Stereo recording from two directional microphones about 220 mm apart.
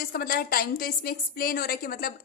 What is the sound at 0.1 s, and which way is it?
A woman's voice, 45° left (ahead or behind).